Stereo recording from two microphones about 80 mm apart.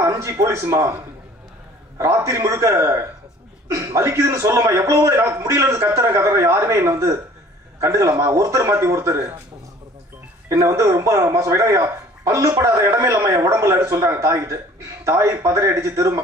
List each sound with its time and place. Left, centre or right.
0.0 s speech: right
2.2 s speech: right
10.5 s speech: right